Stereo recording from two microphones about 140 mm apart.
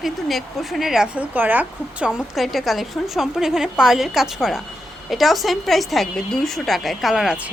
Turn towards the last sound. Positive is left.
turn(degrees=-5)  # may be behind; listen again after turning